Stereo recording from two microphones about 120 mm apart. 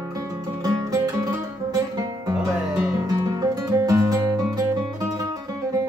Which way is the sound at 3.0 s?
30° right (ahead or behind).